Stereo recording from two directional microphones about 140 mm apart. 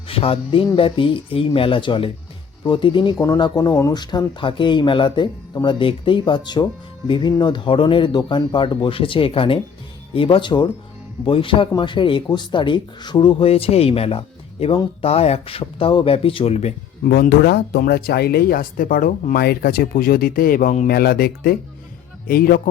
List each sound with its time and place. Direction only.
0.1 s music: 40° left (ahead or behind)
0.8 s speech: 40° left (ahead or behind)
17.0 s speech: 90° left